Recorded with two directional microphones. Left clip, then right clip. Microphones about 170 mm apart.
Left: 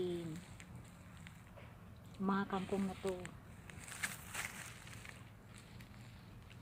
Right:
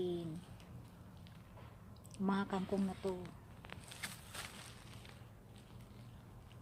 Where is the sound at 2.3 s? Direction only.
15° right (ahead or behind).